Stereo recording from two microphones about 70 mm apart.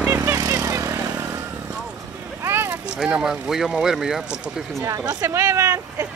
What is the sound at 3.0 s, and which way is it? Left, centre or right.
Speech, centre.